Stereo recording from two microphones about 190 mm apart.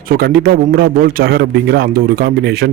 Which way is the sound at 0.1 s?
55° right (ahead or behind).